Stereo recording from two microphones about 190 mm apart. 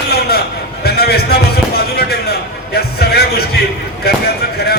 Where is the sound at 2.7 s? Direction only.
55° left (ahead or behind).